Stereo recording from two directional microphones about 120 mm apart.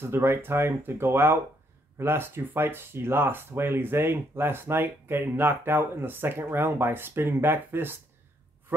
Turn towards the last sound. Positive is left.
turn(degrees=-20)  # may be behind; listen again after turning